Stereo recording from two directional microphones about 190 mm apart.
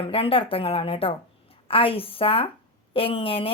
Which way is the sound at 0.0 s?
30° left (ahead or behind).